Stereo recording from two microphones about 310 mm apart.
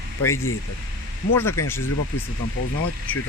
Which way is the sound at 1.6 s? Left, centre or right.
Centre.